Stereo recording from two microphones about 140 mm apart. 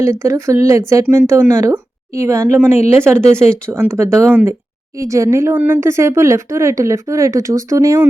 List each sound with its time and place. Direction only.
0.0 s speech: 20° right (ahead or behind)
2.7 s speech: 50° left (ahead or behind)
3.7 s speech: 15° right (ahead or behind)